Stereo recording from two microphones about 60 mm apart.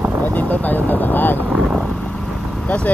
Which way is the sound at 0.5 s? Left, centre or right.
Left.